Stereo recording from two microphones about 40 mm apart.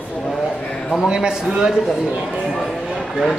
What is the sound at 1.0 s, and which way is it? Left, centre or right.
Speech, right.